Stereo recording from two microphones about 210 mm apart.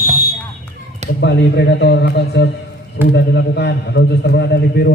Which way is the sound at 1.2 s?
55° left (ahead or behind).